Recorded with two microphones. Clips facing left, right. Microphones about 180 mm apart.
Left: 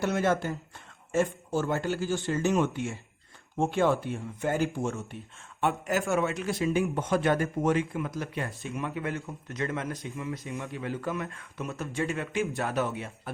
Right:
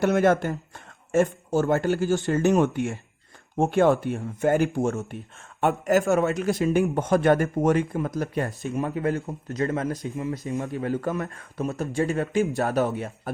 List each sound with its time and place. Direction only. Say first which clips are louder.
0.0 s speech: right 6 dB; 55° right (ahead or behind)